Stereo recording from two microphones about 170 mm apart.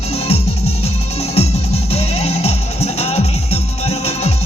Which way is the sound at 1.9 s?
35° left (ahead or behind).